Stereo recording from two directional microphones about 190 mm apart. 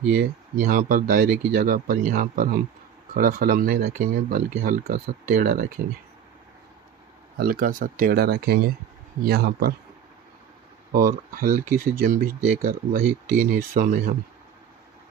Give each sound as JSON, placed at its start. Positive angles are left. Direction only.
{"t": 0.2, "sound": "speech", "side_deg": -50}
{"t": 7.3, "sound": "speech", "side_deg": -50}
{"t": 11.3, "sound": "speech", "side_deg": -45}